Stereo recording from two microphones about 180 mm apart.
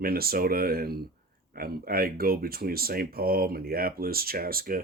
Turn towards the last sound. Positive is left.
turn(degrees=-55)  # may be behind; listen again after turning